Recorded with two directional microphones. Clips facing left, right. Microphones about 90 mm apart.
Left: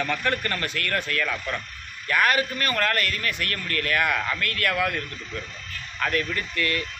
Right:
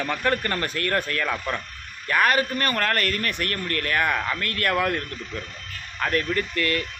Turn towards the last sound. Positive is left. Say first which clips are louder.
# right 3 dB
turn(degrees=-40)  # may be behind; listen again after turning